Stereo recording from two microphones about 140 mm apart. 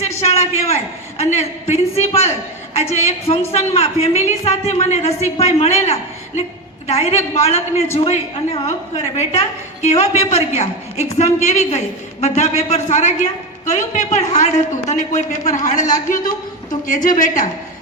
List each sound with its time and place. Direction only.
0.3 s a man's voice: 50° left (ahead or behind); by 17.5 s 70° left (ahead or behind)